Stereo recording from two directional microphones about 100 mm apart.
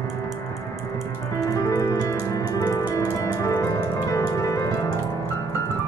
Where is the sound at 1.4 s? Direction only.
35° left (ahead or behind).